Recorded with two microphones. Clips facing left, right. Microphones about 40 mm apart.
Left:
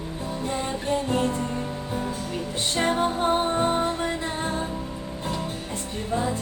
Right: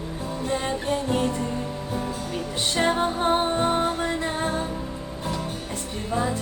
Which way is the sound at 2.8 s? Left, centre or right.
Right.